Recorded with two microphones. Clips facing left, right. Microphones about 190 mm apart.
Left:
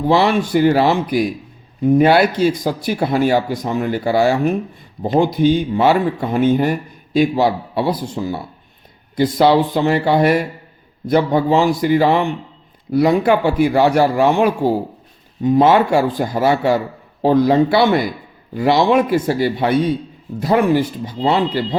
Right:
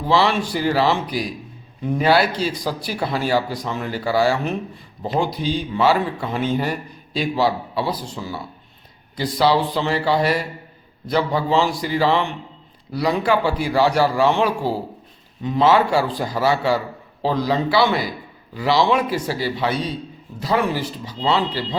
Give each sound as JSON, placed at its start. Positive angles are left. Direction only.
{"t": 0.1, "sound": "speech", "side_deg": 55}
{"t": 9.4, "sound": "speech", "side_deg": 50}
{"t": 11.8, "sound": "speech", "side_deg": 55}